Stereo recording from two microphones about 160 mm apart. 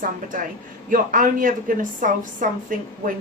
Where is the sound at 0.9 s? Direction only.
55° right (ahead or behind).